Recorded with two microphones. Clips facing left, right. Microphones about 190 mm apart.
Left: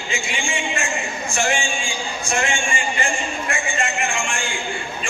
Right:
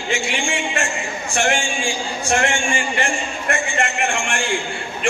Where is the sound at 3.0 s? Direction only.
65° right (ahead or behind).